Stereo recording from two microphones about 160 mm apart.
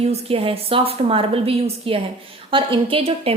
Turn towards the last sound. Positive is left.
turn(degrees=-35)  # may be behind; listen again after turning